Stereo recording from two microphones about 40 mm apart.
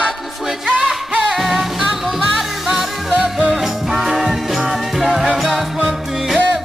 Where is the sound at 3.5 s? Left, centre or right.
Centre.